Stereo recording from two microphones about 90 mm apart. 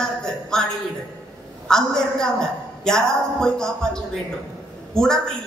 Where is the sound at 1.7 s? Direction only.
5° left (ahead or behind).